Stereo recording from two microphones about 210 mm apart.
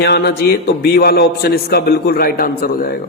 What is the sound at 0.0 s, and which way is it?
A man's voice, 50° left (ahead or behind).